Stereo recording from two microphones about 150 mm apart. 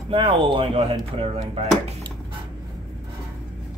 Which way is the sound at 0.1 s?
35° right (ahead or behind).